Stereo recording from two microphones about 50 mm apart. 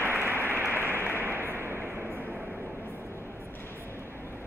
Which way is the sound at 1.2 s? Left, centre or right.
Right.